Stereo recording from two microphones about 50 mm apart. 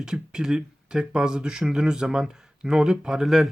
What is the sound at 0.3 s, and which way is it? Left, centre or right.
Speech, centre.